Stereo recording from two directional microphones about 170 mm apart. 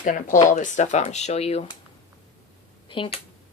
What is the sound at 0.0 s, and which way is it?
Speech, 50° left (ahead or behind).